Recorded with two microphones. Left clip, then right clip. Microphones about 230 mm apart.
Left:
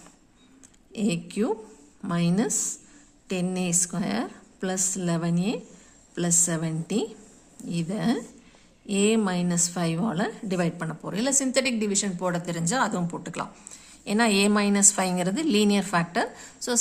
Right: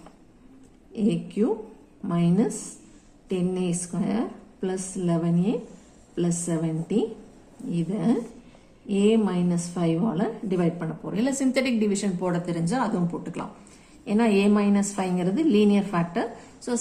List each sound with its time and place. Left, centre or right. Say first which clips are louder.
0.9 s a woman's voice: right 2 dB; left